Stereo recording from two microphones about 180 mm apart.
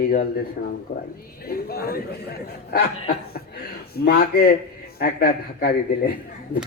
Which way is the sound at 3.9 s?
60° left (ahead or behind).